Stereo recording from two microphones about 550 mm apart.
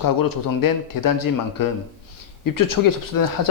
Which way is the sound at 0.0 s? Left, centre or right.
Left.